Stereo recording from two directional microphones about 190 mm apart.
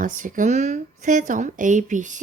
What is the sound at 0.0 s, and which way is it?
Speech, 45° right (ahead or behind).